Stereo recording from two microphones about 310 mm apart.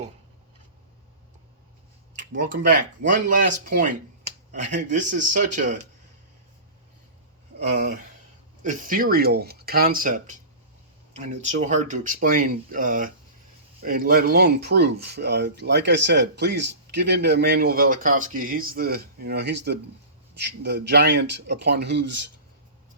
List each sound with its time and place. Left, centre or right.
2.1 s speech: right
7.7 s speech: right